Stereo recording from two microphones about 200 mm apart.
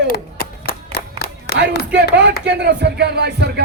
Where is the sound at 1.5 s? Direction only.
55° left (ahead or behind).